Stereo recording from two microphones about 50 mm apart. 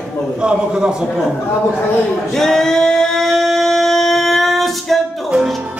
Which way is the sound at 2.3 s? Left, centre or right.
Centre.